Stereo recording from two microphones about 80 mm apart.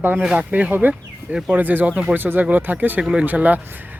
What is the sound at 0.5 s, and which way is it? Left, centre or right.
Speech, right.